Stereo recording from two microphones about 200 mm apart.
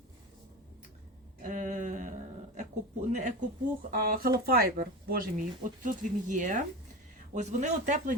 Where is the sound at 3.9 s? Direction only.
45° right (ahead or behind).